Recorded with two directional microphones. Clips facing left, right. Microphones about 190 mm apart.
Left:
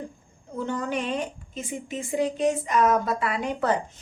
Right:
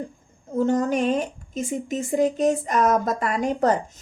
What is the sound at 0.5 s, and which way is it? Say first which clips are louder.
Speech: right 7 dB; 40° right (ahead or behind).